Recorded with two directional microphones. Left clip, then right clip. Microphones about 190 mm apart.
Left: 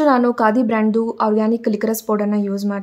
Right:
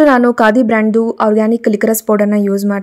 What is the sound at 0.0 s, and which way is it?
A woman's voice, 25° right (ahead or behind).